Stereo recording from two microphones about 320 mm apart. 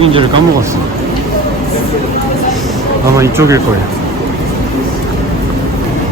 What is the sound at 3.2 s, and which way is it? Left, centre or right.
Speech, centre.